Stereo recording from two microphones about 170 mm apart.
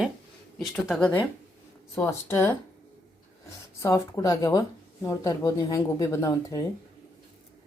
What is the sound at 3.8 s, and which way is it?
Speech, 20° left (ahead or behind).